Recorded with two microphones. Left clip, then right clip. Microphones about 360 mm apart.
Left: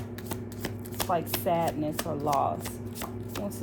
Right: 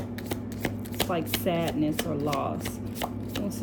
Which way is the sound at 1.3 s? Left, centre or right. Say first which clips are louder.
Even; centre.